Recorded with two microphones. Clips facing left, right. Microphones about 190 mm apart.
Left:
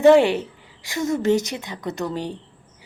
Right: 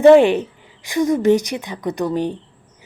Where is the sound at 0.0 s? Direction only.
15° right (ahead or behind).